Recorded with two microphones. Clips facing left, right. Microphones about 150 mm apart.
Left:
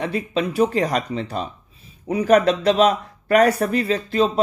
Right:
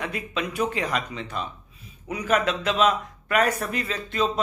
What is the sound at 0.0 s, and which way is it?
Speech, 35° left (ahead or behind).